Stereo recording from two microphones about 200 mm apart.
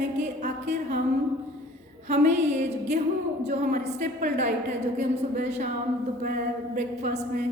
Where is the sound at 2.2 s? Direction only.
35° right (ahead or behind).